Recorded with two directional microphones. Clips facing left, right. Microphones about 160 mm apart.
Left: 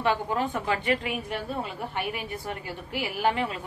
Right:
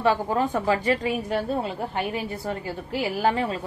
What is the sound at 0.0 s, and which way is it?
A woman's voice, 35° right (ahead or behind).